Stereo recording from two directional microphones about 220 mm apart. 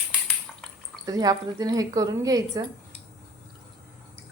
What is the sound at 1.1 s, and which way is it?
A woman's voice, 15° right (ahead or behind).